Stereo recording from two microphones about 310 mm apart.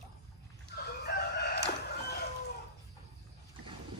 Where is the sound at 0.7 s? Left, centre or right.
Left.